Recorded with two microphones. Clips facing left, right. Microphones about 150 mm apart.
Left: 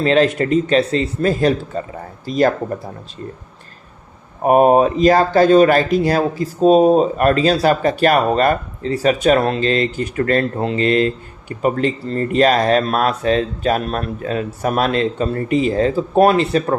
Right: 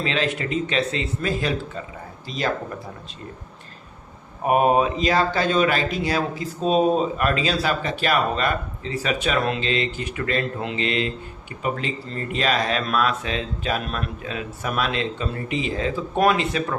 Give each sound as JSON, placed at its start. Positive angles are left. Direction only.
{"t": 0.0, "sound": "speech", "side_deg": 45}
{"t": 4.4, "sound": "speech", "side_deg": 40}